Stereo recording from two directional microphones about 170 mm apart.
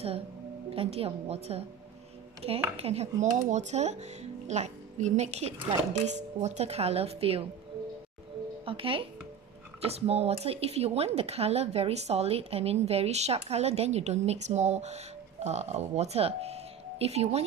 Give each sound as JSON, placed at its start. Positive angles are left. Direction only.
{"t": 0.7, "sound": "speech", "side_deg": -35}
{"t": 2.8, "sound": "speech", "side_deg": -40}
{"t": 8.6, "sound": "speech", "side_deg": -30}